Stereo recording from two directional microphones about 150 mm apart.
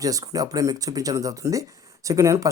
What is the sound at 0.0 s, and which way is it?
Speech, 25° right (ahead or behind).